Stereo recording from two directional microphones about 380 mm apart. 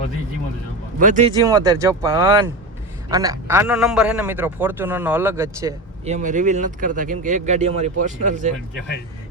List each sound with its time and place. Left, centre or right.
0.9 s a man's voice: centre